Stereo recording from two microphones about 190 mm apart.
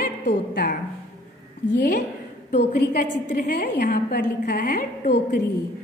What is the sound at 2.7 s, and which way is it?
A woman's voice, 50° left (ahead or behind).